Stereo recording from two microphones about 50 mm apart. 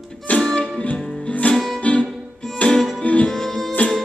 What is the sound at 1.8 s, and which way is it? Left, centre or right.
Music, left.